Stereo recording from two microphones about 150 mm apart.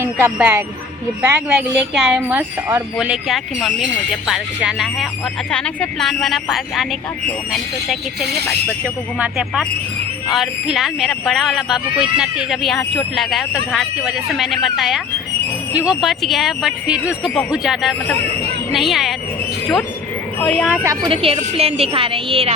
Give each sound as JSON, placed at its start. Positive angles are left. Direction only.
{"t": 0.0, "sound": "speech", "side_deg": -15}
{"t": 9.1, "sound": "speech", "side_deg": -5}
{"t": 20.4, "sound": "speech", "side_deg": 5}
{"t": 21.1, "sound": "a woman's voice", "side_deg": -35}